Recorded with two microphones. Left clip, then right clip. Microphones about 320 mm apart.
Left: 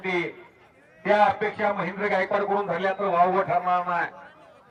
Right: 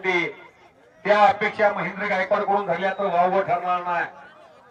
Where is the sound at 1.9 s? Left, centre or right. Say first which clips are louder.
Right 2 dB; centre.